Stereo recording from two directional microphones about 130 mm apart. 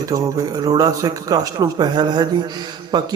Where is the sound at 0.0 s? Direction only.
30° right (ahead or behind).